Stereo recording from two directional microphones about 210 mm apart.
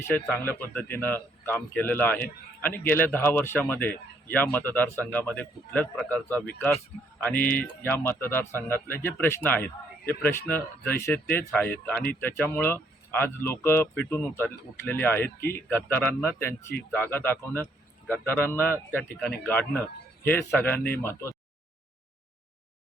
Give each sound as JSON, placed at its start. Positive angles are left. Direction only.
{"t": 0.1, "sound": "speech", "side_deg": 5}